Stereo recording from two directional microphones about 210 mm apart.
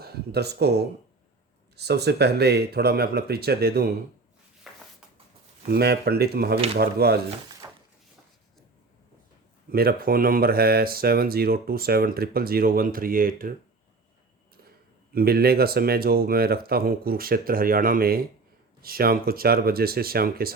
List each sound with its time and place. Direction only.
0.0 s speech: 50° right (ahead or behind)
4.7 s a sound: centre (ahead or behind)
5.7 s speech: 50° right (ahead or behind)
7.6 s a sound: 15° right (ahead or behind)
9.6 s speech: 45° right (ahead or behind)
15.1 s speech: 45° right (ahead or behind)